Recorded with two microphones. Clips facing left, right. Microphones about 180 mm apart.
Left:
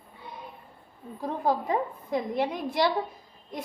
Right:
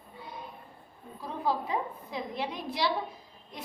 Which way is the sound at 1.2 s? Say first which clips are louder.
Left 4 dB; 50° left (ahead or behind).